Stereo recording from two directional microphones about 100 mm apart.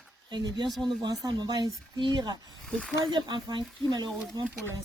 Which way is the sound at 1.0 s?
40° right (ahead or behind).